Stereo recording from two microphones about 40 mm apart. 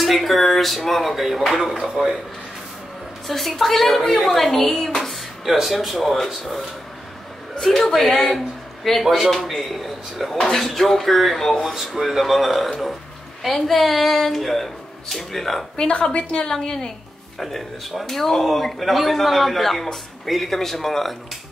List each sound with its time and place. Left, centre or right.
0.0 s a man's voice: centre
3.3 s a man's voice: centre
7.6 s a woman's voice: centre
9.0 s speech: centre
9.3 s a man's voice: centre
10.3 s a woman's voice: centre
15.7 s a woman's voice: left
16.4 s a woman's voice: centre
17.4 s a man's voice: centre